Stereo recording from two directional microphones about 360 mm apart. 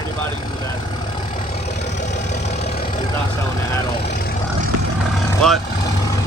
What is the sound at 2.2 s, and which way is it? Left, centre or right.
Vehicle, centre.